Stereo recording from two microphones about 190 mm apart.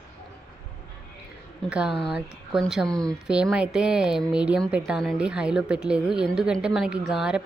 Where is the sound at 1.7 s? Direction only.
5° right (ahead or behind).